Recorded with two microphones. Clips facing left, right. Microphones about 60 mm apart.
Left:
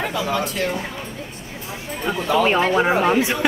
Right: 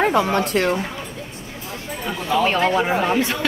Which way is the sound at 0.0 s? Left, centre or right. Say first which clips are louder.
Right 5 dB; right.